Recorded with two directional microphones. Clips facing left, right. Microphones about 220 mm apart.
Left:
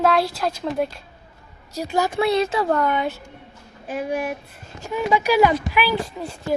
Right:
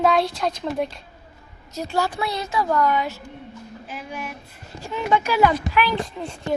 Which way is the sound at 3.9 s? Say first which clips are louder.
Left 10 dB; 60° left (ahead or behind).